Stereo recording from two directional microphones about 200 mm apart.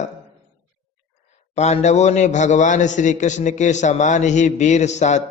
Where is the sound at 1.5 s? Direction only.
35° left (ahead or behind).